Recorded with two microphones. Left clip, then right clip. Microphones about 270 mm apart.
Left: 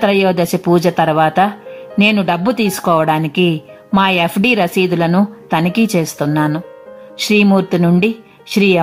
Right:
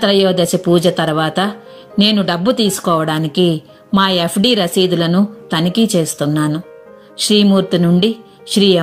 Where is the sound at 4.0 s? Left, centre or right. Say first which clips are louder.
Left 1 dB; centre.